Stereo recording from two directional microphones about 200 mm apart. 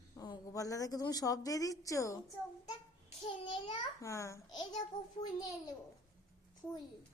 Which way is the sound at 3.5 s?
25° left (ahead or behind).